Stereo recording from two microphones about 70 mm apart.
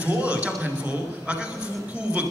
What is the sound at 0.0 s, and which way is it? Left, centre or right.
A man's voice, centre.